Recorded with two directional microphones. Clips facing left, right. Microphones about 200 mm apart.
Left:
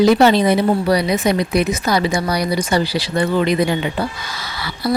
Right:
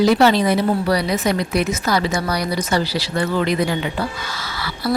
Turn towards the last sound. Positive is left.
turn(degrees=15)  # may be behind; listen again after turning